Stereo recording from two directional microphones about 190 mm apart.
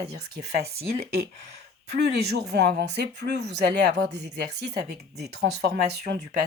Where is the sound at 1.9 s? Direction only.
60° right (ahead or behind).